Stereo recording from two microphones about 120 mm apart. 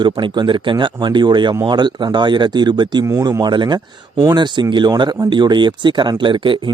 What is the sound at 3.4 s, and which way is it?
Speech, 40° right (ahead or behind).